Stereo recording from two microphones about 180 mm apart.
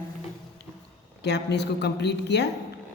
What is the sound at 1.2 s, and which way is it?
Speech, 70° left (ahead or behind).